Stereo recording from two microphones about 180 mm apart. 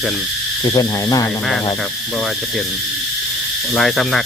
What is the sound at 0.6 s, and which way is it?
Speech, 20° left (ahead or behind).